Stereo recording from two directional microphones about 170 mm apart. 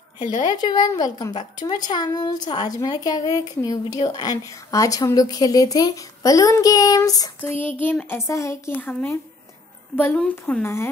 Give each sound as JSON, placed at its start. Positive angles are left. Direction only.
{"t": 0.4, "sound": "a woman's voice", "side_deg": 25}